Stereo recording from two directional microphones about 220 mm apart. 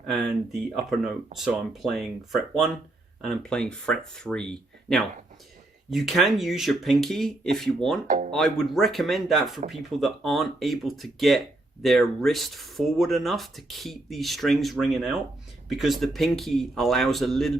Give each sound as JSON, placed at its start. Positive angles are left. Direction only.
{"t": 0.6, "sound": "speech", "side_deg": 0}
{"t": 8.0, "sound": "speech", "side_deg": -35}
{"t": 8.3, "sound": "speech", "side_deg": 0}